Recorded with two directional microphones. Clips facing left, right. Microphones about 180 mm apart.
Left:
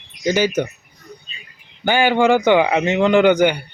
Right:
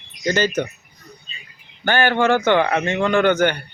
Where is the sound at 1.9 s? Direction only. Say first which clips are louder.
Left 3 dB; 15° left (ahead or behind).